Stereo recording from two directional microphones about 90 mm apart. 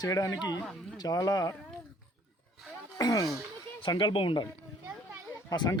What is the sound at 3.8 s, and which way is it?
Speech, 60° left (ahead or behind).